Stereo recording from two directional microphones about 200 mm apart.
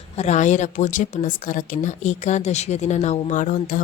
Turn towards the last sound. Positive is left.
turn(degrees=40)  # may be behind; listen again after turning